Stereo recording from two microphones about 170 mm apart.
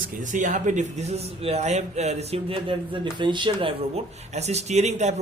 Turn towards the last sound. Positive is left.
turn(degrees=-40)  # may be behind; listen again after turning